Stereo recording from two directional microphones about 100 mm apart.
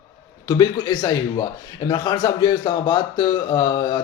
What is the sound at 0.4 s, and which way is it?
Speech, 40° left (ahead or behind).